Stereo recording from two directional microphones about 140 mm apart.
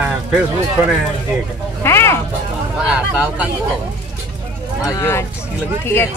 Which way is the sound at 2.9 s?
10° right (ahead or behind).